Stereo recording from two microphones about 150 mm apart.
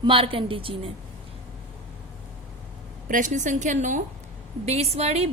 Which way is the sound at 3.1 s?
60° right (ahead or behind).